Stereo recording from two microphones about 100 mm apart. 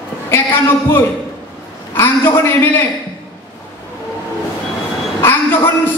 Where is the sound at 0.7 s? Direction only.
20° left (ahead or behind).